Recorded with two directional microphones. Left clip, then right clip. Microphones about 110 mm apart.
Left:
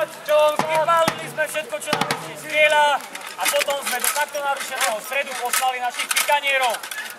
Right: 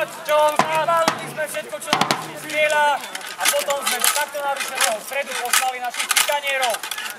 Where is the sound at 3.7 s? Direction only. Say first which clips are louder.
Right 2 dB; 10° right (ahead or behind).